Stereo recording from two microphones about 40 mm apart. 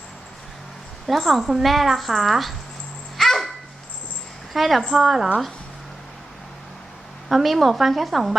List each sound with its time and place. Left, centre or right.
1.0 s a woman's voice: centre
3.2 s dog: centre
4.5 s a woman's voice: centre
7.3 s a woman's voice: centre